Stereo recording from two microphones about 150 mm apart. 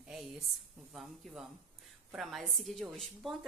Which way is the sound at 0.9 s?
Centre (ahead or behind).